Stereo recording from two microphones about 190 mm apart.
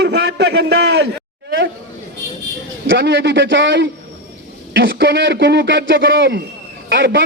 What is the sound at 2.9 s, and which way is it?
A man's voice, 65° right (ahead or behind).